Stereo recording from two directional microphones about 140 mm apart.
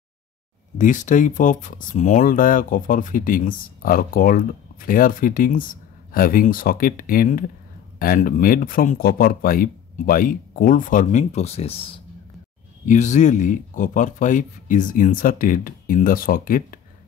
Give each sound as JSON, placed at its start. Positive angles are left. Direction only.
{"t": 0.7, "sound": "speech", "side_deg": 65}
{"t": 12.8, "sound": "speech", "side_deg": 60}